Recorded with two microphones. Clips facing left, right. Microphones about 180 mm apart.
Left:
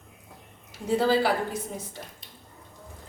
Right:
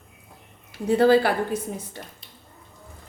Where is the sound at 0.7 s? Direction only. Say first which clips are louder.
Right 6 dB; 60° right (ahead or behind).